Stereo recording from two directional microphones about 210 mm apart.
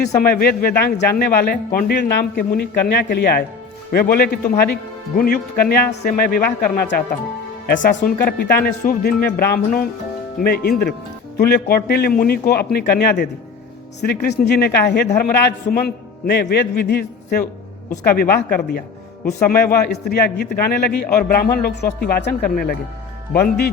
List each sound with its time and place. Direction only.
0.2 s speech: 45° left (ahead or behind)